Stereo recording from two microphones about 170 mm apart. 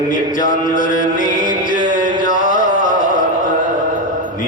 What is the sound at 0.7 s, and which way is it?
Music, 50° left (ahead or behind).